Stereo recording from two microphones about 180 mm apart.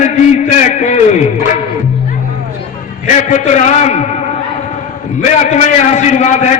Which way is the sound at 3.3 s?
40° left (ahead or behind).